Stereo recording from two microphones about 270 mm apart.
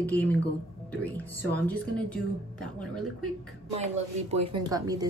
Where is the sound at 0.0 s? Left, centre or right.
Centre.